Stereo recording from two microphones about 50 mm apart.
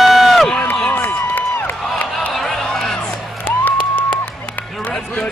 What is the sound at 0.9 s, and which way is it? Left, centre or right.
Run, left.